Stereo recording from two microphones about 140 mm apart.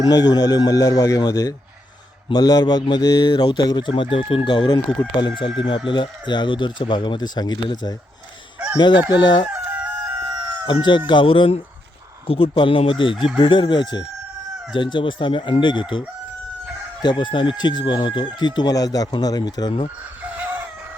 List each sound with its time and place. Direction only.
0.0 s speech: 30° left (ahead or behind)
8.5 s fowl: 10° right (ahead or behind)
9.1 s speech: 30° left (ahead or behind)
9.5 s crowing: 10° right (ahead or behind)
10.7 s speech: 35° left (ahead or behind)